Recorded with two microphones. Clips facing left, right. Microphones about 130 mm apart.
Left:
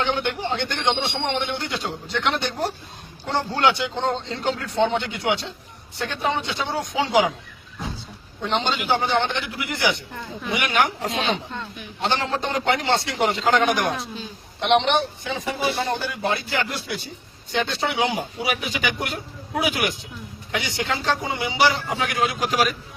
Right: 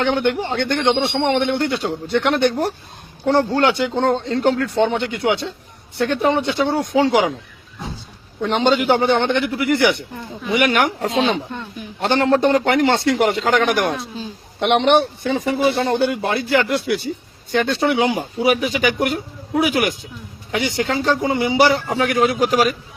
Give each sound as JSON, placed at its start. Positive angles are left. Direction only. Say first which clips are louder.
{"t": 0.0, "sound": "speech", "louder": "right 6 dB", "side_deg": -55}
{"t": 8.5, "sound": "a man's voice", "louder": "right 7 dB", "side_deg": -55}
{"t": 11.1, "sound": "speech", "louder": "right 6 dB", "side_deg": -25}
{"t": 12.0, "sound": "a man's voice", "louder": "right 9 dB", "side_deg": -60}